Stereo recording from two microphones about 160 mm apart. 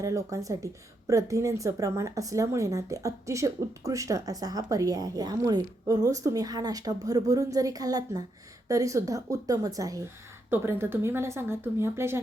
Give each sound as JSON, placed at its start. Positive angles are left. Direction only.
{"t": 0.0, "sound": "a woman's voice", "side_deg": -20}